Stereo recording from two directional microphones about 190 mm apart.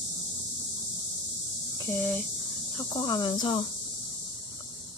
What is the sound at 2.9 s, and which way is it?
Speech, 20° left (ahead or behind).